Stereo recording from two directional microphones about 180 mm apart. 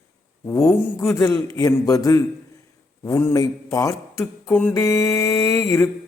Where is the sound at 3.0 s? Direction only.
15° left (ahead or behind).